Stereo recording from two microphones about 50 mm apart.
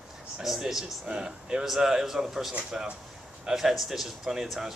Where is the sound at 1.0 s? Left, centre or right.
Centre.